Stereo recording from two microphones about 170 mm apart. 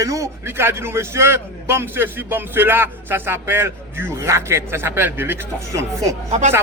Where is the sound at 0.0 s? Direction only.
20° right (ahead or behind).